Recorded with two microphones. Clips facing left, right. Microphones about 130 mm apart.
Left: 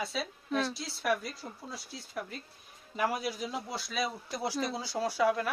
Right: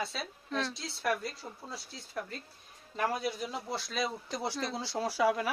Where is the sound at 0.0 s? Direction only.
Centre (ahead or behind).